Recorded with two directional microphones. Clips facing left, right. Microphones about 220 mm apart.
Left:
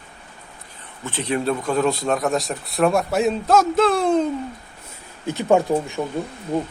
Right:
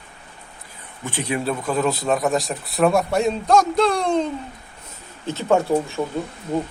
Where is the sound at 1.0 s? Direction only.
10° right (ahead or behind).